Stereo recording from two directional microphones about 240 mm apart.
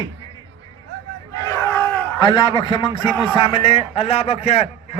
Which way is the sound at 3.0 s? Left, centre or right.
Centre.